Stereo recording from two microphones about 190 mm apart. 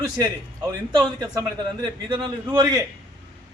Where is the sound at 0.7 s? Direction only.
20° right (ahead or behind).